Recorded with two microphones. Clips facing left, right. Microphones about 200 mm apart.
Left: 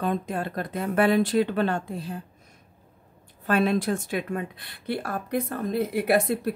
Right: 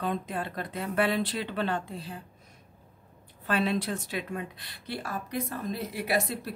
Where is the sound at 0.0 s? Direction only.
45° left (ahead or behind).